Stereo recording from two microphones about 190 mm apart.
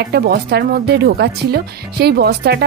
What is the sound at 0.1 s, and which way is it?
A woman's voice, 60° right (ahead or behind).